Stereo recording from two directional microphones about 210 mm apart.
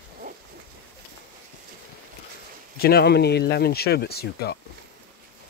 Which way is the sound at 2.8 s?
45° left (ahead or behind).